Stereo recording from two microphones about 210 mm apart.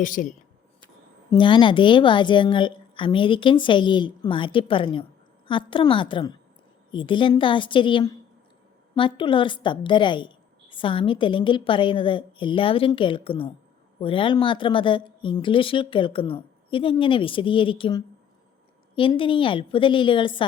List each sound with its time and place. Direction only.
0.0 s speech: 40° left (ahead or behind)
1.3 s a woman's voice: 20° left (ahead or behind)